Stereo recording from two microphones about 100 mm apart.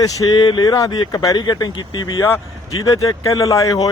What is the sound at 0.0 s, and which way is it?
Speech, 40° left (ahead or behind).